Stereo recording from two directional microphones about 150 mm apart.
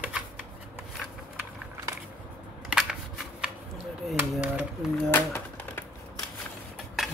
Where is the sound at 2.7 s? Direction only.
5° right (ahead or behind).